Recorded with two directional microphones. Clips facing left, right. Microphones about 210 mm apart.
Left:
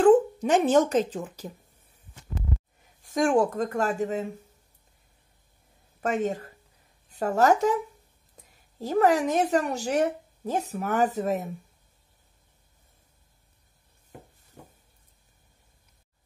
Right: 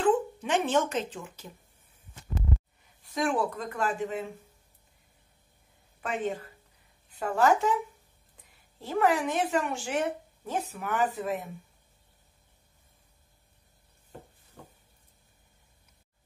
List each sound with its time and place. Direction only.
0.0 s speech: 40° left (ahead or behind)
3.0 s speech: 45° left (ahead or behind)
5.9 s a woman's voice: 45° left (ahead or behind)
8.7 s a woman's voice: 40° left (ahead or behind)